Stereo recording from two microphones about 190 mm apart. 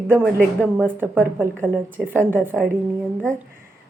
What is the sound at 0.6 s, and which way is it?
A woman's voice, 5° left (ahead or behind).